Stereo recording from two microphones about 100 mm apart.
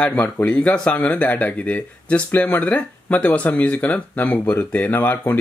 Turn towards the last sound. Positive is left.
turn(degrees=20)  # may be behind; listen again after turning